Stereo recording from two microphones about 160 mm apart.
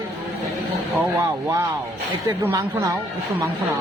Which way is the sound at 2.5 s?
20° right (ahead or behind).